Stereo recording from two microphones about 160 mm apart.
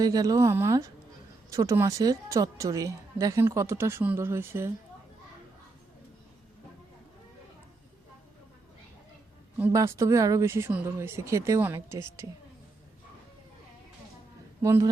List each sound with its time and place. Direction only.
0.0 s a woman's voice: 20° right (ahead or behind)
9.6 s speech: 10° right (ahead or behind)
14.6 s a man's voice: 20° right (ahead or behind)